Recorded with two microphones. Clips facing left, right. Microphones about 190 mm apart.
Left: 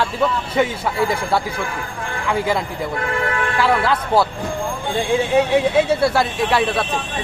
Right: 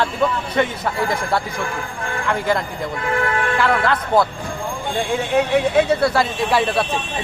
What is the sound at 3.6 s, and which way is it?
Speech, 10° left (ahead or behind).